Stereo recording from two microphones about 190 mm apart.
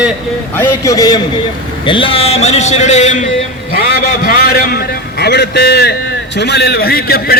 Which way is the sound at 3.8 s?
50° left (ahead or behind).